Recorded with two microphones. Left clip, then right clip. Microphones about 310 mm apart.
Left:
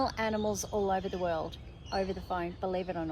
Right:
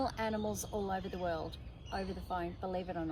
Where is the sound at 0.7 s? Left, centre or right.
Left.